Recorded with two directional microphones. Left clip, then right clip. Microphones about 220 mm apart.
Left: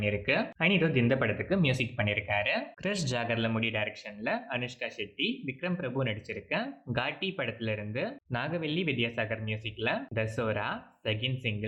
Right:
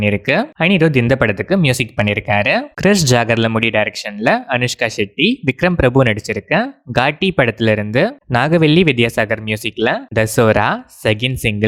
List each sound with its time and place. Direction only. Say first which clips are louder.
0.0 s speech: right 13 dB; 50° right (ahead or behind)